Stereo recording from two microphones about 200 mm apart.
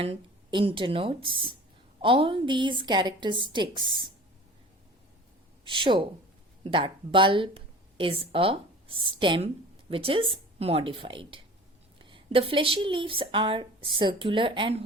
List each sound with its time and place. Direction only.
0.0 s speech: 30° right (ahead or behind)
5.6 s speech: 25° right (ahead or behind)